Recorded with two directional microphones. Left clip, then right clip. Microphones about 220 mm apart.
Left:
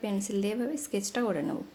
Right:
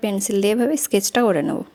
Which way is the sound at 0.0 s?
40° right (ahead or behind).